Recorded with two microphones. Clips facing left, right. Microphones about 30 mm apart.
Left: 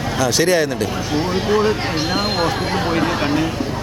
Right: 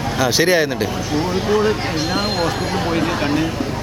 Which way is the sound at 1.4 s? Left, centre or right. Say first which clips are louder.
Even; centre.